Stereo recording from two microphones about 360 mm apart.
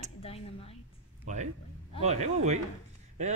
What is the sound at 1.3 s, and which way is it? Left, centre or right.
A man's voice, centre.